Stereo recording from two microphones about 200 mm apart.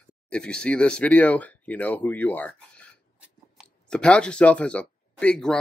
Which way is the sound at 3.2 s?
Centre (ahead or behind).